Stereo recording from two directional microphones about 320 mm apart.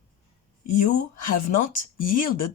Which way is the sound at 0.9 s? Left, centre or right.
Left.